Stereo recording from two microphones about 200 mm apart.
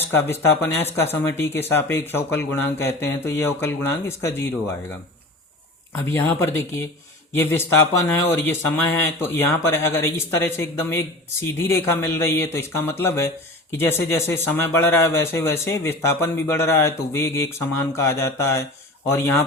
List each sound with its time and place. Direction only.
0.0 s speech: 10° left (ahead or behind)
5.9 s speech: 15° left (ahead or behind)
8.0 s speech: 10° left (ahead or behind)